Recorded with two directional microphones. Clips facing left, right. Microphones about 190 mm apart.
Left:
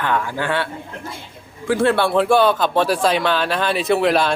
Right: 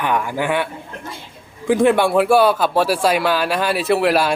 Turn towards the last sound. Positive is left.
turn(degrees=-5)  # may be behind; listen again after turning